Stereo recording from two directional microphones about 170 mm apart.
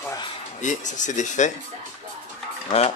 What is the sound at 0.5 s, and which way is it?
Speech, 45° left (ahead or behind).